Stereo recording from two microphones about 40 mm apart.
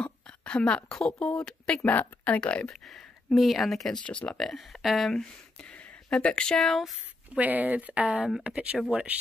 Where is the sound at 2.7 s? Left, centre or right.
Centre.